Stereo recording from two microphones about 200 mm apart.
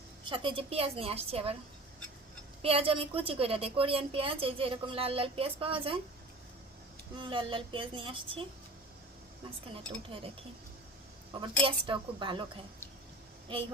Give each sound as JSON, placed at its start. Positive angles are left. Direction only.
{"t": 0.3, "sound": "a woman's voice", "side_deg": -25}
{"t": 2.6, "sound": "a woman's voice", "side_deg": -30}
{"t": 7.2, "sound": "a woman's voice", "side_deg": -25}
{"t": 9.7, "sound": "a woman's voice", "side_deg": -25}
{"t": 11.6, "sound": "a woman's voice", "side_deg": -25}